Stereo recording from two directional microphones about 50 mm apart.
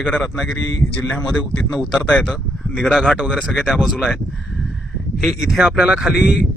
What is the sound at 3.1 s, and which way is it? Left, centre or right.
Speech, centre.